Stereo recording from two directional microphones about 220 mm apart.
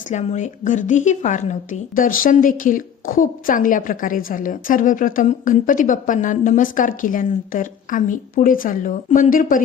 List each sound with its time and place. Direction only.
0.1 s a woman's voice: 30° left (ahead or behind)